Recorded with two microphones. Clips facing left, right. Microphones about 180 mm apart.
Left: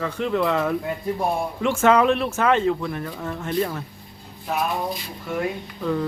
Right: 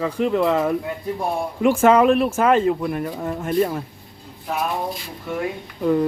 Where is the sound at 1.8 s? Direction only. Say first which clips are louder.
Right 2 dB; 5° right (ahead or behind).